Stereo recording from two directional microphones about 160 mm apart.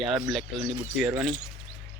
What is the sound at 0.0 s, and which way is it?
Speech, centre (ahead or behind).